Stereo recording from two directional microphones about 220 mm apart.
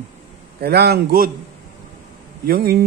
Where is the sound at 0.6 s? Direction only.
45° right (ahead or behind).